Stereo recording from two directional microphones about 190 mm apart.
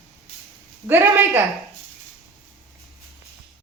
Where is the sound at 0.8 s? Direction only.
15° right (ahead or behind).